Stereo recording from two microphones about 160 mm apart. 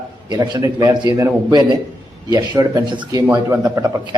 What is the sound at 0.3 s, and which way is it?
A man's voice, 25° right (ahead or behind).